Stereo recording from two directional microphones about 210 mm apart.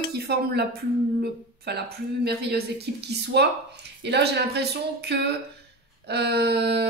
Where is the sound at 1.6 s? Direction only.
50° right (ahead or behind).